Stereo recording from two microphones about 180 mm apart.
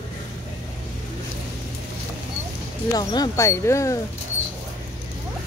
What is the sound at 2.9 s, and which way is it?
Speech, 20° left (ahead or behind).